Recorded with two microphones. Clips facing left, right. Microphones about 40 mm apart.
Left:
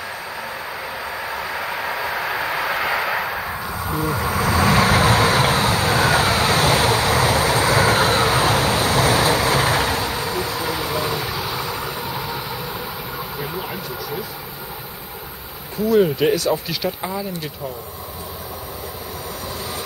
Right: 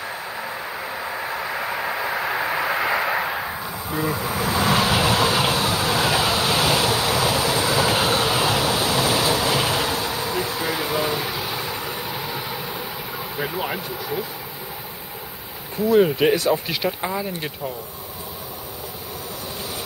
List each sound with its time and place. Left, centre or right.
0.4 s vehicle: centre
3.4 s a sound: centre
3.7 s a sound: left
4.1 s vehicle: left
10.4 s vehicle: centre
13.6 s vehicle: right
15.9 s speech: centre